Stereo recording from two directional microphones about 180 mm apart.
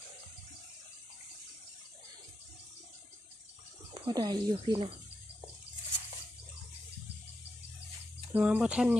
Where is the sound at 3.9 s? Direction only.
25° right (ahead or behind).